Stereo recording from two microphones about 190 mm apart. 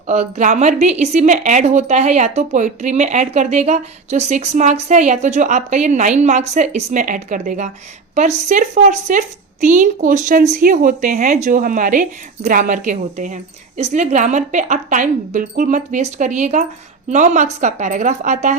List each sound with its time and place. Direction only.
0.1 s a woman's voice: 35° right (ahead or behind)